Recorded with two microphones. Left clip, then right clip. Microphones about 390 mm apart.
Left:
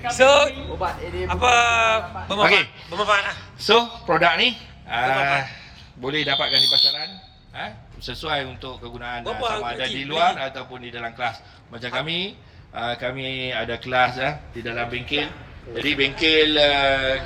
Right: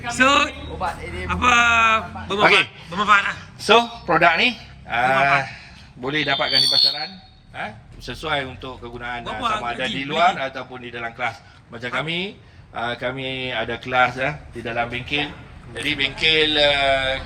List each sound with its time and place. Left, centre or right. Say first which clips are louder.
0.2 s a woman's voice: left 2 dB; centre
15.7 s a man's voice: left 1 dB; right